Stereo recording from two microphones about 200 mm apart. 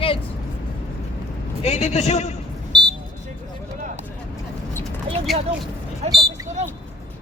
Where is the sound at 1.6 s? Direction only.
30° left (ahead or behind).